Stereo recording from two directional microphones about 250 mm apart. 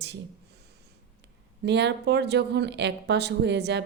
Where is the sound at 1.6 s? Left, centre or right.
Right.